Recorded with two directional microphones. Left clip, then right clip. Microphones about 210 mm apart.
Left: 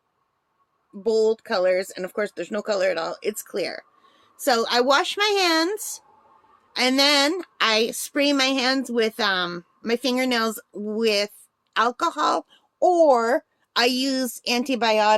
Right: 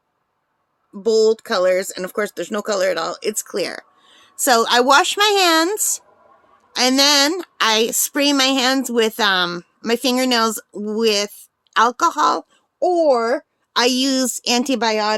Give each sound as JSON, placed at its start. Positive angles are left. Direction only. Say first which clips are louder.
{"t": 0.9, "sound": "speech", "louder": "right 5 dB", "side_deg": -15}
{"t": 12.5, "sound": "a child's voice", "louder": "right 1 dB", "side_deg": 0}
{"t": 13.7, "sound": "a woman's voice", "louder": "right 4 dB", "side_deg": -20}